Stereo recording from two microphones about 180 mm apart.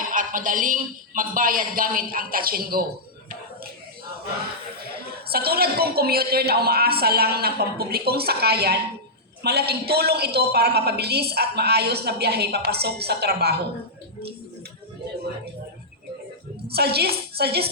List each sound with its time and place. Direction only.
0.1 s a man's voice: 50° right (ahead or behind)
5.3 s a woman's voice: 60° right (ahead or behind)
16.6 s a woman's voice: 60° right (ahead or behind)